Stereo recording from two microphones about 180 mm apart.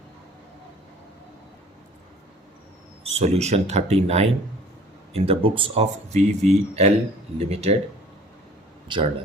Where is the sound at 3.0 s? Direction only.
35° right (ahead or behind).